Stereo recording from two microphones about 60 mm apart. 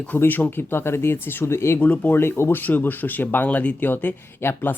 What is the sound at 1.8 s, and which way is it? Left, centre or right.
Speech, left.